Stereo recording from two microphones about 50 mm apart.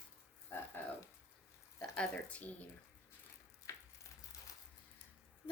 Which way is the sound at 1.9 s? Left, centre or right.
Left.